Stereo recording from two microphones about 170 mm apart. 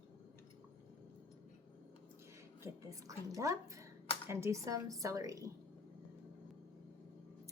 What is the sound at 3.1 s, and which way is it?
A woman's voice, 20° right (ahead or behind).